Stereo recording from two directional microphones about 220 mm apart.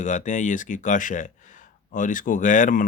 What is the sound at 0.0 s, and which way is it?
Speech, 35° left (ahead or behind).